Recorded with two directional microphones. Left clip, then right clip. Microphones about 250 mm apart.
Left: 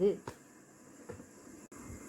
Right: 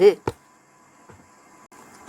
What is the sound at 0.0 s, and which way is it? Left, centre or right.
Speech, right.